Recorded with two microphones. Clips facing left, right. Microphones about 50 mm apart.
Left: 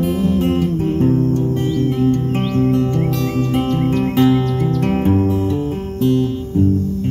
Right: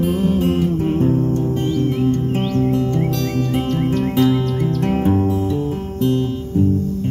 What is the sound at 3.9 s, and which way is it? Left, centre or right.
Music, left.